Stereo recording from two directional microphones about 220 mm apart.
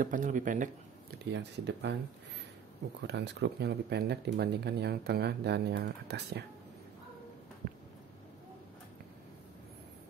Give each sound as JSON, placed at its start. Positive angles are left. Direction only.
{"t": 0.0, "sound": "speech", "side_deg": -35}
{"t": 1.3, "sound": "speech", "side_deg": -50}
{"t": 3.0, "sound": "speech", "side_deg": -50}